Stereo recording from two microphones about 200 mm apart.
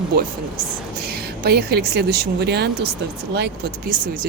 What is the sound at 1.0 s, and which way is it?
A woman's voice, 50° right (ahead or behind).